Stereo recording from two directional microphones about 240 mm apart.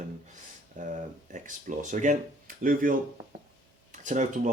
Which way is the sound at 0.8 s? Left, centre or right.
Right.